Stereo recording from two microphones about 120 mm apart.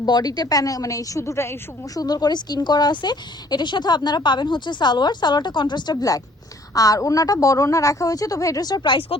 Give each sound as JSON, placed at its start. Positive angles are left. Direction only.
{"t": 0.0, "sound": "a woman's voice", "side_deg": 35}